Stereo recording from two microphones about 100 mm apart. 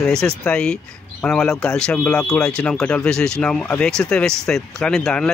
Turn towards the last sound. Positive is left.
turn(degrees=5)  # may be behind; listen again after turning